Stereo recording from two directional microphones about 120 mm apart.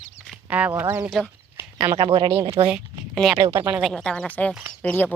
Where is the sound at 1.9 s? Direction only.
45° right (ahead or behind).